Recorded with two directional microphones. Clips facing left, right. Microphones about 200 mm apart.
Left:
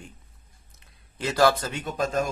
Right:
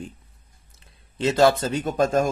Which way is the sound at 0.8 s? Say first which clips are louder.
Right 7 dB; 25° right (ahead or behind).